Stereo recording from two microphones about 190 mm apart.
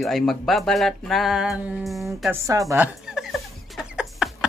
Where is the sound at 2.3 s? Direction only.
15° right (ahead or behind).